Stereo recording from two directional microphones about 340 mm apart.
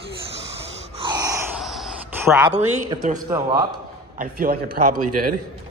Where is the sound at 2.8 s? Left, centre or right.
Right.